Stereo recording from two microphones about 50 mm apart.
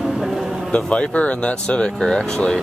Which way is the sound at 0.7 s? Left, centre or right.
Left.